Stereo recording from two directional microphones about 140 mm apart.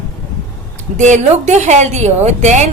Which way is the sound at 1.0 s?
55° right (ahead or behind).